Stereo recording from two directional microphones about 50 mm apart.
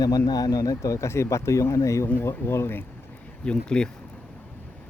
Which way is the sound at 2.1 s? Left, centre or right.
Left.